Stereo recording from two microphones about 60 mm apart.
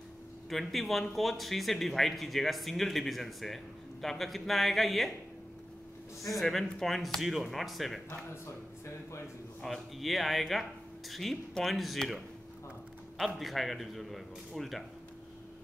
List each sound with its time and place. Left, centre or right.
0.5 s speech: centre
6.2 s speech: centre
9.6 s speech: centre
13.2 s speech: centre